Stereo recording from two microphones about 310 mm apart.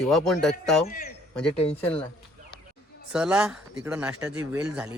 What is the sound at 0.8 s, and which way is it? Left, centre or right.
Speech, left.